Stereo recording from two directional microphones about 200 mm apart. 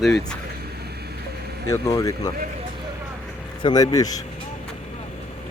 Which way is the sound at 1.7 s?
15° left (ahead or behind).